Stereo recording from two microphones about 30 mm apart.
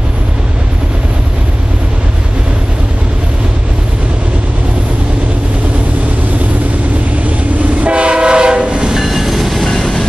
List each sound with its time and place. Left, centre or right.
7.8 s train: right
8.9 s train: centre
9.7 s train: centre